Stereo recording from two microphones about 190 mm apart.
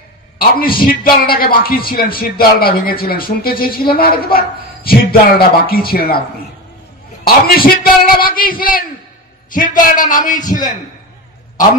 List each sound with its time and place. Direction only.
0.4 s a man's voice: 50° left (ahead or behind)
7.2 s a man's voice: 50° left (ahead or behind)